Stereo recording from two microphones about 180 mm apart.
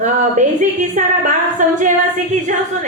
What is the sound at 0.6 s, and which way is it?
A woman's voice, 45° right (ahead or behind).